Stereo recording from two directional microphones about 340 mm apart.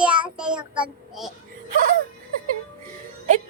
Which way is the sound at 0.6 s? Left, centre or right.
Centre.